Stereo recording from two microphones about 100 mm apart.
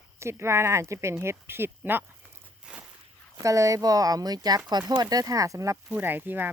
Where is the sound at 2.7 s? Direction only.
10° right (ahead or behind).